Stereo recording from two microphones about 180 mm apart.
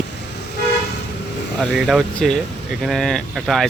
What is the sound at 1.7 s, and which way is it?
Speech, centre (ahead or behind).